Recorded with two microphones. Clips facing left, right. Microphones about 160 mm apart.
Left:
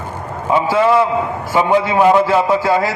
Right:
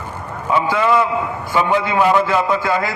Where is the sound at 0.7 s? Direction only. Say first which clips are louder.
Left 4 dB; 35° left (ahead or behind).